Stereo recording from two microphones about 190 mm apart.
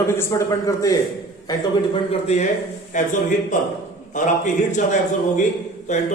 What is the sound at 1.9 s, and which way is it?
A man's voice, 30° left (ahead or behind).